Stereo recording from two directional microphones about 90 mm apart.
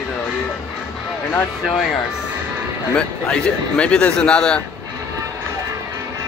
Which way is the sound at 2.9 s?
10° left (ahead or behind).